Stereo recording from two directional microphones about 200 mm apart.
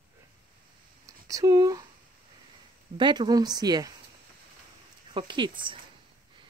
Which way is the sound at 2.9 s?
25° right (ahead or behind).